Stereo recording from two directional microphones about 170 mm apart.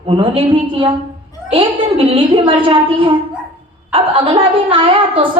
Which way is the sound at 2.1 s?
30° right (ahead or behind).